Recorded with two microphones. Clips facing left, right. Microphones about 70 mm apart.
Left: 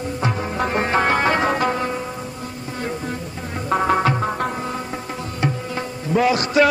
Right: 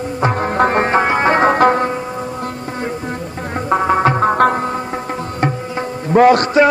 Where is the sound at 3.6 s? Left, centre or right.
Centre.